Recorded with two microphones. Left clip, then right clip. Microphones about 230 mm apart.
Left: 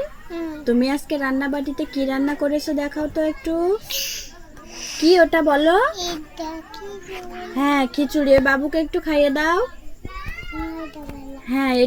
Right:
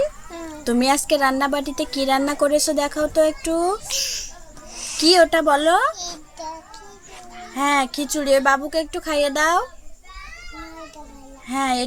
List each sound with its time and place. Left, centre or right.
0.6 s a woman's voice: right
11.4 s a woman's voice: right